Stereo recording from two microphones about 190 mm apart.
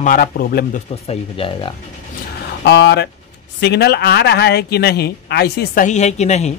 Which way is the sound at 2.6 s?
65° left (ahead or behind).